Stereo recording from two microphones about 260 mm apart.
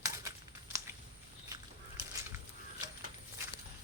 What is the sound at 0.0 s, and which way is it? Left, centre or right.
Crumpling, centre.